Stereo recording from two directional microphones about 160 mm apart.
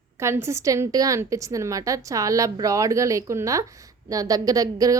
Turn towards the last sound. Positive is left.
turn(degrees=-20)  # may be behind; listen again after turning